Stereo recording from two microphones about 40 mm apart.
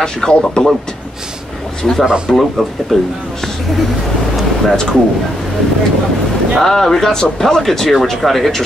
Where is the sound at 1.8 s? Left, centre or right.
Centre.